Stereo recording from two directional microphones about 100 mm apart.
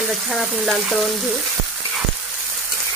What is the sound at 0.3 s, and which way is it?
Speech, centre (ahead or behind).